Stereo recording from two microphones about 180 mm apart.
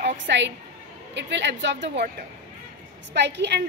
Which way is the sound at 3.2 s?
70° right (ahead or behind).